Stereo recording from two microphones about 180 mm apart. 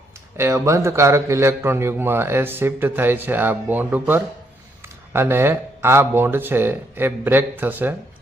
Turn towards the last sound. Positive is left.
turn(degrees=-10)  # may be behind; listen again after turning